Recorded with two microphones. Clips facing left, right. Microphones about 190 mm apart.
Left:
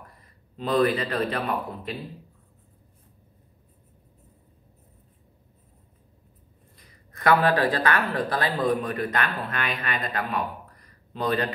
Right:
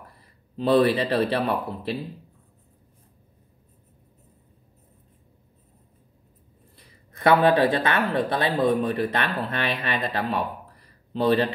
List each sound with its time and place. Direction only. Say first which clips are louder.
0.6 s a man's voice: right 3 dB; 30° right (ahead or behind)
7.1 s a sound: right 2 dB; 25° right (ahead or behind)
7.4 s speech: right 3 dB; 20° right (ahead or behind)